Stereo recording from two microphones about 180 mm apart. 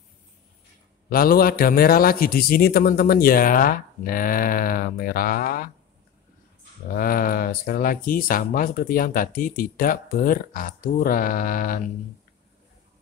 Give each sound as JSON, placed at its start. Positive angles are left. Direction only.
{"t": 1.1, "sound": "speech", "side_deg": 55}
{"t": 7.0, "sound": "speech", "side_deg": 50}